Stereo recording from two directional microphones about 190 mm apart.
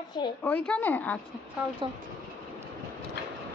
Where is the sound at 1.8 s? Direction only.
25° right (ahead or behind).